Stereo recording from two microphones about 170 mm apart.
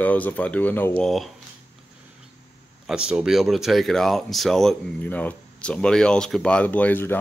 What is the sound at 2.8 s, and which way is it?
Speech, 5° right (ahead or behind).